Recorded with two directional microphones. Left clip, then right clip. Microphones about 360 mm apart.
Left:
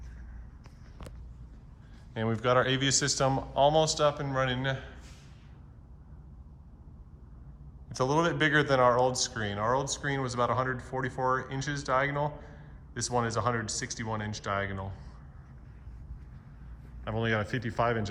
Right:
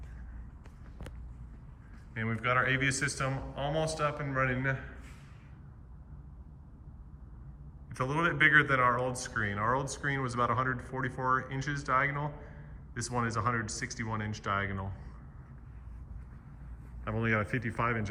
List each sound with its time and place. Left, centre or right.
2.1 s speech: centre
7.9 s speech: centre
17.0 s speech: centre